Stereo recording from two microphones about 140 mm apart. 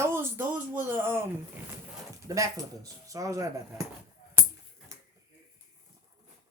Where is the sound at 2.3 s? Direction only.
25° right (ahead or behind).